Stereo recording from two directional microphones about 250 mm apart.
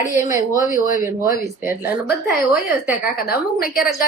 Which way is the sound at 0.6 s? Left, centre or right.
Left.